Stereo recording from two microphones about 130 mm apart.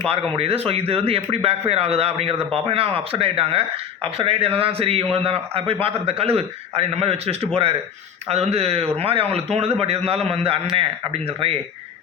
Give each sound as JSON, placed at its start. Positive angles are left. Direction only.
{"t": 0.0, "sound": "speech", "side_deg": -50}